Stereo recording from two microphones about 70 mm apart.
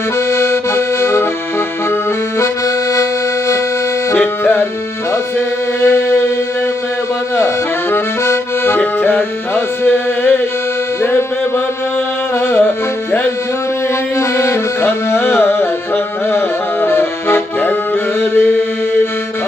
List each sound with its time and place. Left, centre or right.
0.3 s accordion: left
2.4 s accordion: left
4.1 s music: left
5.8 s music: left
8.2 s accordion: left
8.8 s music: left
12.6 s music: left
14.2 s music: left
16.8 s accordion: left
18.2 s music: left